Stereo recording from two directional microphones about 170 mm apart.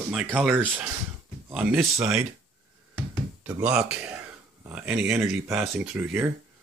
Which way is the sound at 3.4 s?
15° right (ahead or behind).